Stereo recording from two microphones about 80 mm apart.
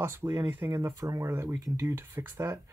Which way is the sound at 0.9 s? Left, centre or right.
Right.